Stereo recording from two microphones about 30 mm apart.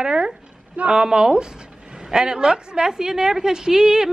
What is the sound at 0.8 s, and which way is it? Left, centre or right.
Speech, right.